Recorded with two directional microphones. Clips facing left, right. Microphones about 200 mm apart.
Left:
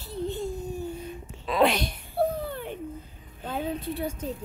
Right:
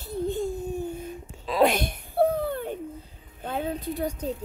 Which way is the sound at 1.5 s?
45° right (ahead or behind).